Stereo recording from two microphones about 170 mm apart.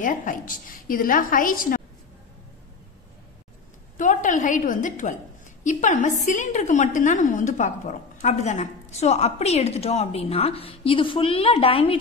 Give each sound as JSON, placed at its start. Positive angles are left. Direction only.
{"t": 0.0, "sound": "a woman's voice", "side_deg": 50}
{"t": 4.0, "sound": "a sound", "side_deg": 50}
{"t": 5.6, "sound": "a woman's voice", "side_deg": 45}